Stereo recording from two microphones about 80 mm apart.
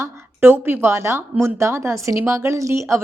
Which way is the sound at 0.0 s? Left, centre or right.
Right.